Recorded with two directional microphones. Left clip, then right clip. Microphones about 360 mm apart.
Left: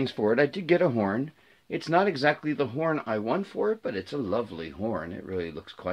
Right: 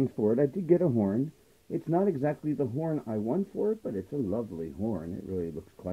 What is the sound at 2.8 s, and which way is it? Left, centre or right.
Speech, left.